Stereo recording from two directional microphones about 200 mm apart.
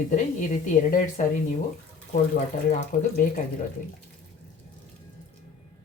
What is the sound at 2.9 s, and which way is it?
Speech, 40° left (ahead or behind).